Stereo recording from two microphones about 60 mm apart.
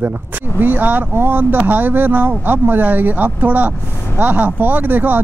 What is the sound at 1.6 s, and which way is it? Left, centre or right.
Speech, right.